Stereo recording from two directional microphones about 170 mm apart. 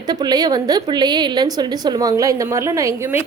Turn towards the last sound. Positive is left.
turn(degrees=-15)  # may be behind; listen again after turning